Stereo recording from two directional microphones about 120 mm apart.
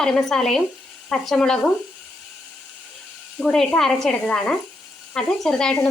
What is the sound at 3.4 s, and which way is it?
Speech, 5° left (ahead or behind).